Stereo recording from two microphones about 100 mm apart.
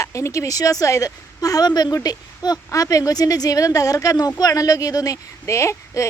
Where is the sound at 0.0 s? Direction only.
30° left (ahead or behind).